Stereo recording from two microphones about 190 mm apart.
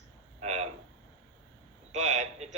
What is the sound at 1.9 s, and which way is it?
Speech, 40° right (ahead or behind).